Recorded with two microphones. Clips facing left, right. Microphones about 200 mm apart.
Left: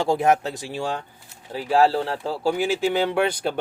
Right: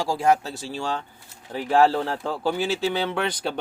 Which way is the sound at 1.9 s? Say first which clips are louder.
Left 1 dB; 35° left (ahead or behind).